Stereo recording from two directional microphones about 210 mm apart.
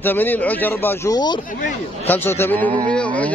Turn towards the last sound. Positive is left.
turn(degrees=5)  # may be behind; listen again after turning